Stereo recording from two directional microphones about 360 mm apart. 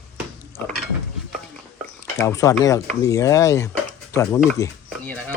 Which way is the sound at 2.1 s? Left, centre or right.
Centre.